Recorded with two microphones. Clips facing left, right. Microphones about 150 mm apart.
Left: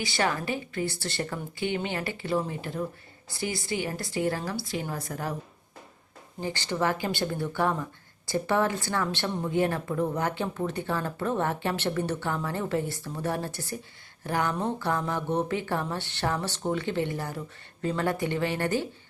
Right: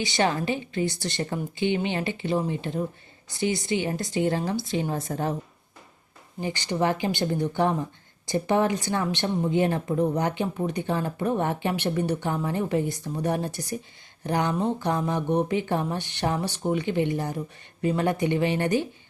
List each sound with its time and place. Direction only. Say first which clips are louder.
0.0 s a woman's voice: right 4 dB; 20° right (ahead or behind)
6.4 s a woman's voice: right 3 dB; 15° right (ahead or behind)